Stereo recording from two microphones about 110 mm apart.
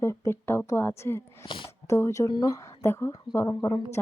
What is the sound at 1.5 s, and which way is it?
Speech, 45° left (ahead or behind).